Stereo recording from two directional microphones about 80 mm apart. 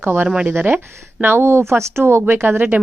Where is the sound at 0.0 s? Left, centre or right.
Right.